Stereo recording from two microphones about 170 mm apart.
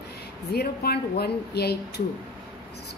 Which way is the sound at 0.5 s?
70° left (ahead or behind).